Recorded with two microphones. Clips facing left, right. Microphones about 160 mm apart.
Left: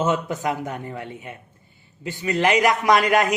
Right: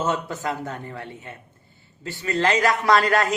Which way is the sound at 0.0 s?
20° left (ahead or behind).